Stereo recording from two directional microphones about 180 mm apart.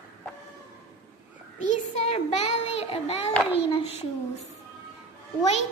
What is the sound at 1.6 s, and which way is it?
A child's voice, 40° left (ahead or behind).